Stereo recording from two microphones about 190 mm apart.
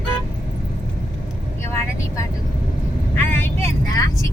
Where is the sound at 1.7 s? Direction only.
15° left (ahead or behind).